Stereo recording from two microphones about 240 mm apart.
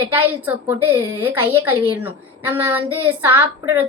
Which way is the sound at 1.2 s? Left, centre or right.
Centre.